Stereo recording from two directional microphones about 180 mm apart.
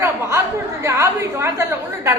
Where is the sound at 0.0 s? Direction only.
15° right (ahead or behind).